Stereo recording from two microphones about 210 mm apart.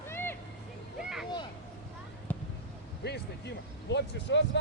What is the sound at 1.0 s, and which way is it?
Vehicle, centre (ahead or behind).